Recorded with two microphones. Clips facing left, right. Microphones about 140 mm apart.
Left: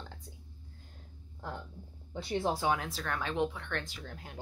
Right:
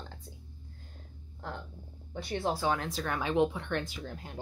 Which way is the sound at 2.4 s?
15° left (ahead or behind).